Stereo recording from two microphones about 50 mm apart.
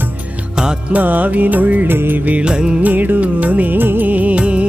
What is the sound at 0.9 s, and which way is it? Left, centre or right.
Music, right.